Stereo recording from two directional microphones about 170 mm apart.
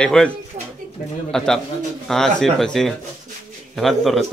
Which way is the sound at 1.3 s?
Centre (ahead or behind).